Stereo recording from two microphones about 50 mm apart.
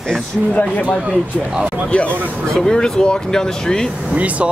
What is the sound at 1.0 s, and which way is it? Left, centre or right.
Speech, centre.